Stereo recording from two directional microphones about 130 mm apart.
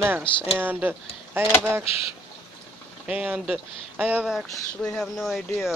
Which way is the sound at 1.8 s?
50° left (ahead or behind).